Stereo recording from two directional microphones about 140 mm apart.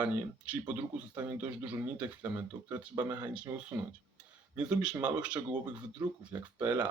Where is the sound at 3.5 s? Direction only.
25° right (ahead or behind).